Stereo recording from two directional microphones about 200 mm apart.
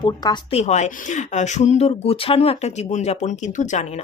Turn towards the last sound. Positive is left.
turn(degrees=35)  # may be behind; listen again after turning